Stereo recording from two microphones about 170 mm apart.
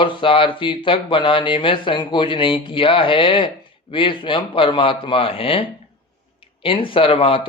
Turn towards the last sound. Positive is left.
turn(degrees=30)  # may be behind; listen again after turning